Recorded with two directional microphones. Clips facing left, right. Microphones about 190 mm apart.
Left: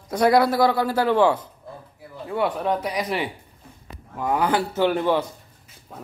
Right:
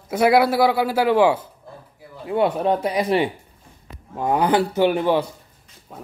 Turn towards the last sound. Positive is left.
turn(degrees=-15)  # may be behind; listen again after turning